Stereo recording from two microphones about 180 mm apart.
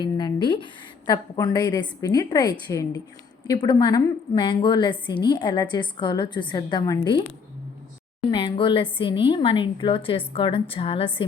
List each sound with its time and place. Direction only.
0.0 s a woman's voice: 25° left (ahead or behind)
8.3 s a woman's voice: 30° left (ahead or behind)